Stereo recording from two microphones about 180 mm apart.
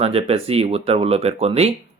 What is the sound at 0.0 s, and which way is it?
Speech, 35° right (ahead or behind).